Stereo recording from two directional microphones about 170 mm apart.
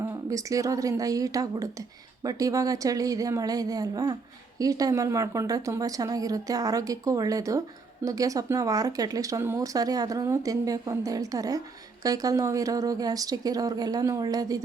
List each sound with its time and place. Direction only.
0.0 s speech: 20° right (ahead or behind)